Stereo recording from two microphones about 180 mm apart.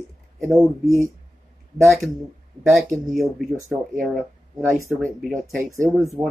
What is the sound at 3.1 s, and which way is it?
Speech, centre (ahead or behind).